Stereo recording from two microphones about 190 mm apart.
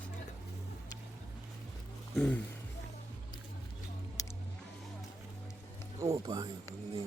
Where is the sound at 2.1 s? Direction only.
5° left (ahead or behind).